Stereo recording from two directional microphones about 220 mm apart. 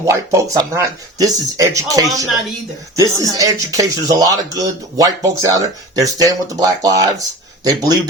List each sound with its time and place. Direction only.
0.0 s speech: 15° right (ahead or behind)